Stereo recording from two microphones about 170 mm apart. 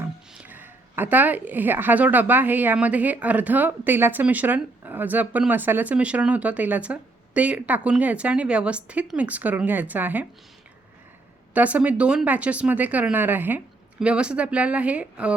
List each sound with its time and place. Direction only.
0.0 s a woman's voice: 10° right (ahead or behind)
11.5 s a woman's voice: 10° right (ahead or behind)